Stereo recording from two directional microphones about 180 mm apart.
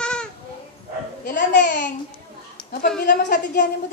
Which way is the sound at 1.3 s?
65° left (ahead or behind).